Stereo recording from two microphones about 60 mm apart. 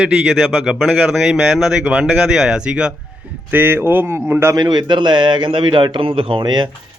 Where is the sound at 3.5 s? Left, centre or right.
Right.